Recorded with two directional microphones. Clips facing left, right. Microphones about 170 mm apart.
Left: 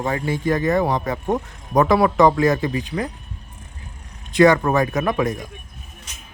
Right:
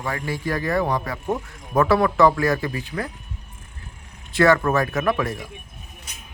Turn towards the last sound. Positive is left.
turn(degrees=20)  # may be behind; listen again after turning